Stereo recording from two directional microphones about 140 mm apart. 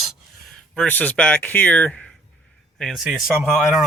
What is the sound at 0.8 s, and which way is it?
Speech, 10° left (ahead or behind).